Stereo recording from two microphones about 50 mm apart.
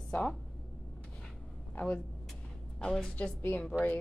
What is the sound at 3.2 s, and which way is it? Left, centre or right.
Speech, left.